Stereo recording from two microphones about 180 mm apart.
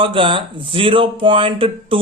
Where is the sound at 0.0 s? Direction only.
30° right (ahead or behind).